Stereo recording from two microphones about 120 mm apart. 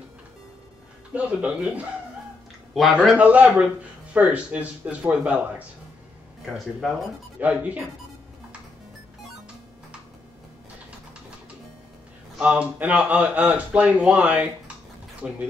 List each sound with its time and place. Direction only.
1.1 s speech: 10° right (ahead or behind)
3.2 s speech: 10° right (ahead or behind)
7.3 s speech: 15° right (ahead or behind)
12.4 s speech: 10° right (ahead or behind)